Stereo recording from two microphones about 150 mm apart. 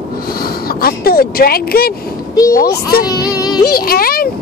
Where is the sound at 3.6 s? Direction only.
90° left.